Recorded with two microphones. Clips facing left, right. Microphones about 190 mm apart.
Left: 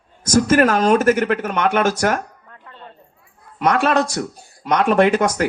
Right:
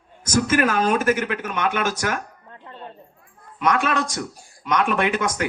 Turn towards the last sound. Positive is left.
turn(degrees=40)  # may be behind; listen again after turning